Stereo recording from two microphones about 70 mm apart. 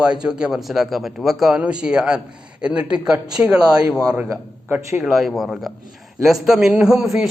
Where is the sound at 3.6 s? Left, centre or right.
Right.